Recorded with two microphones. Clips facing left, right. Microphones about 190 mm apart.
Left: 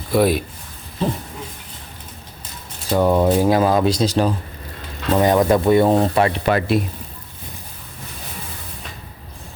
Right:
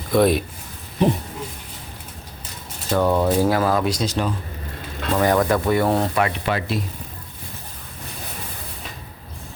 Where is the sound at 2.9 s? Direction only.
15° left (ahead or behind); by 4.3 s 35° left (ahead or behind).